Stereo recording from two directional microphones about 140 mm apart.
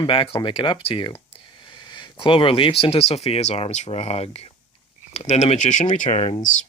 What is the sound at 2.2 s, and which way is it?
Speech, 40° left (ahead or behind).